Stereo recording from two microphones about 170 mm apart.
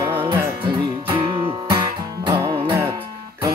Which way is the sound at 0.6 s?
30° right (ahead or behind).